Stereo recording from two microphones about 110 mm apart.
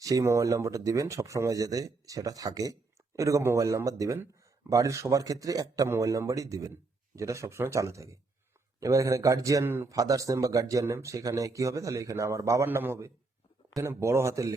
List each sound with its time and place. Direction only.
0.0 s speech: 30° right (ahead or behind)
9.9 s speech: 30° right (ahead or behind)